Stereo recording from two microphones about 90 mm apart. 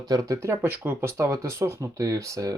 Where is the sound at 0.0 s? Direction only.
45° right (ahead or behind).